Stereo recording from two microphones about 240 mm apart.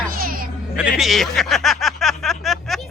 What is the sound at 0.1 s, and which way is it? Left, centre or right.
Music, right.